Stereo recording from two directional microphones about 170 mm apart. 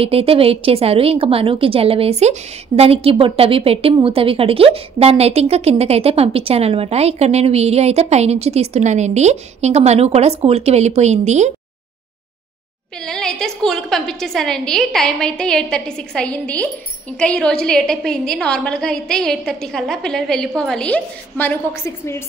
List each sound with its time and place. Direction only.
0.0 s a woman's voice: 35° right (ahead or behind)
13.0 s a woman's voice: 5° left (ahead or behind)